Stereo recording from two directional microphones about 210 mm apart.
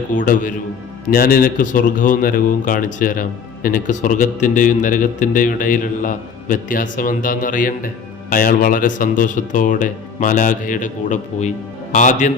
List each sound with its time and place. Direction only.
0.1 s speech: 40° left (ahead or behind)